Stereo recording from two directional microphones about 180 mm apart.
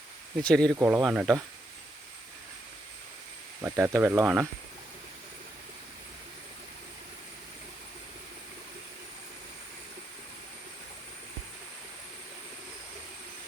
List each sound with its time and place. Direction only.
0.4 s speech: 5° left (ahead or behind)
0.8 s speech: 15° right (ahead or behind)
3.6 s speech: 15° right (ahead or behind)